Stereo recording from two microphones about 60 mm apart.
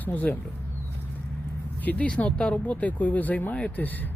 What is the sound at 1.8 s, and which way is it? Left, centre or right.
Speech, left.